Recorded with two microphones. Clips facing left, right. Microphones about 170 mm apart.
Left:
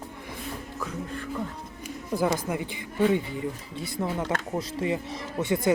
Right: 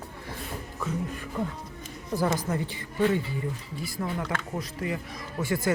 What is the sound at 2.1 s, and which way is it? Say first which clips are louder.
Speech: left 1 dB; 10° left (ahead or behind).